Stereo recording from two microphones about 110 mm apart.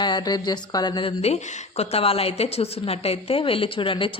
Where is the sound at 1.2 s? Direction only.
70° left (ahead or behind); by 4.1 s 50° left (ahead or behind).